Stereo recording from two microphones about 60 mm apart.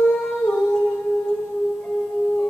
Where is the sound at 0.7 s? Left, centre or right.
Centre.